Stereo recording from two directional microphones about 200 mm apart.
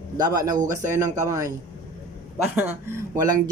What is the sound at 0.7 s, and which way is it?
Speech, 15° right (ahead or behind).